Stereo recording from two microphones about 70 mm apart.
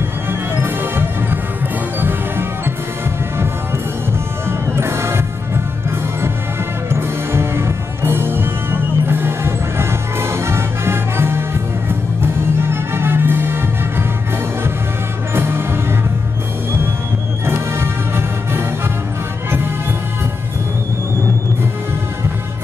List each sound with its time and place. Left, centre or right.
0.3 s music: right
4.5 s music: right
6.9 s music: right
15.3 s music: right
17.5 s music: right